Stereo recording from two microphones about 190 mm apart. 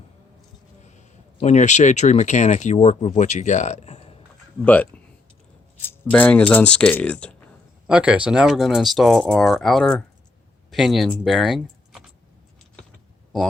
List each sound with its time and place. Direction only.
0.9 s speech: 35° left (ahead or behind)
4.6 s speech: 10° left (ahead or behind)
7.9 s speech: 5° right (ahead or behind)